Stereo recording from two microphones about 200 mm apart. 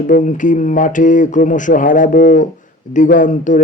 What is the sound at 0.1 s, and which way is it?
Speech, 40° left (ahead or behind).